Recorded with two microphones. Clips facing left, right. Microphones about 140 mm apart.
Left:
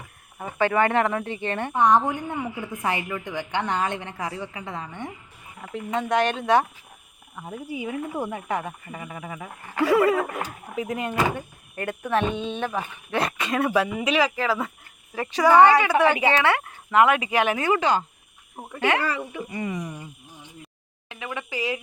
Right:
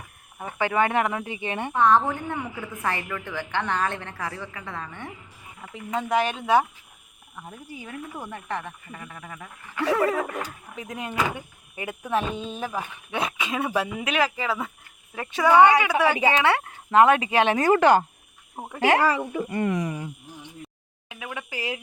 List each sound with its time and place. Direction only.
0.6 s speech: 15° right (ahead or behind)
1.7 s a woman's voice: 15° left (ahead or behind)
5.7 s speech: 5° right (ahead or behind)
7.3 s a woman's voice: 10° left (ahead or behind); by 16.6 s 20° right (ahead or behind)
16.9 s speech: 30° right (ahead or behind)
17.6 s speech: 50° right (ahead or behind)
18.5 s speech: 30° right (ahead or behind)
19.3 s speech: 50° right (ahead or behind); by 20.1 s 80° right
21.1 s speech: 5° right (ahead or behind)